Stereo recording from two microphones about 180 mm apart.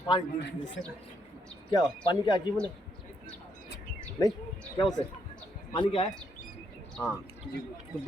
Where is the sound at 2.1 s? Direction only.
25° left (ahead or behind).